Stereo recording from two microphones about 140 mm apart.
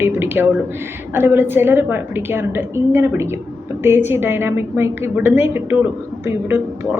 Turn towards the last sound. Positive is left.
turn(degrees=-15)  # may be behind; listen again after turning